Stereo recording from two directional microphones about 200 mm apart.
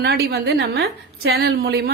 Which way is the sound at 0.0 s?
50° right (ahead or behind).